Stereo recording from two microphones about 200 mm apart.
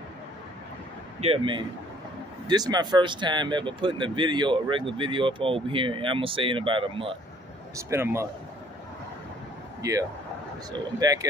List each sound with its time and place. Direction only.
1.2 s speech: 25° right (ahead or behind)
7.7 s a man's voice: 15° right (ahead or behind)
9.8 s a man's voice: 15° right (ahead or behind)